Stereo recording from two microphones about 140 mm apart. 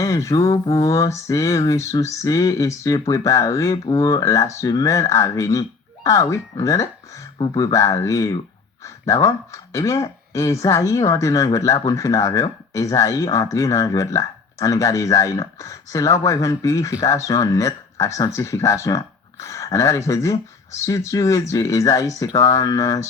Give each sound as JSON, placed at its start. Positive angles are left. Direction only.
{"t": 0.0, "sound": "speech", "side_deg": 20}
{"t": 7.3, "sound": "speech", "side_deg": 35}
{"t": 7.6, "sound": "speech", "side_deg": 20}